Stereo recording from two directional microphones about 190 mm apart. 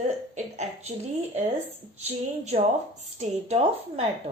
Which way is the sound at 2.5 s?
35° right (ahead or behind).